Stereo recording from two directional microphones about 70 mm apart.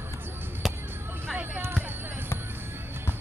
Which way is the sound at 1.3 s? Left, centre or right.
Right.